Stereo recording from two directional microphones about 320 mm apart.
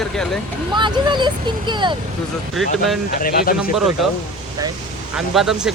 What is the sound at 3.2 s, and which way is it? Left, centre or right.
Speech, left.